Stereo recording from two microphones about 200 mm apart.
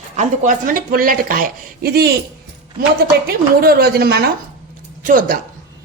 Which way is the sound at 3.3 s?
50° right (ahead or behind).